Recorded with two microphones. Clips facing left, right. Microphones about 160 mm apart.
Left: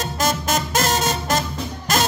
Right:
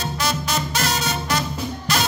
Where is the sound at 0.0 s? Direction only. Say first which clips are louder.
Left 3 dB; 45° left (ahead or behind).